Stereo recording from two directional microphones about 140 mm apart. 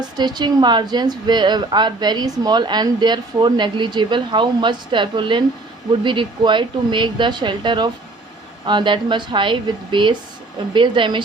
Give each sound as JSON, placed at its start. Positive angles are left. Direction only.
{"t": 0.0, "sound": "a woman's voice", "side_deg": -30}